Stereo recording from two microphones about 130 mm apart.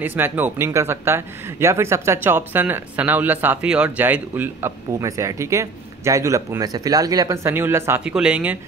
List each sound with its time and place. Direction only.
0.0 s speech: 15° right (ahead or behind)
8.0 s speech: 10° right (ahead or behind)